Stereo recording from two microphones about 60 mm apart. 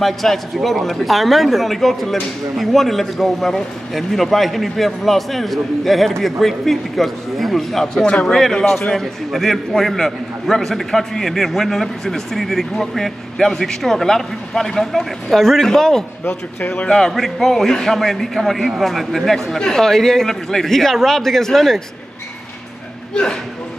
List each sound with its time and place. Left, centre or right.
0.0 s a man's voice: centre
16.3 s a man's voice: left
16.8 s a man's voice: centre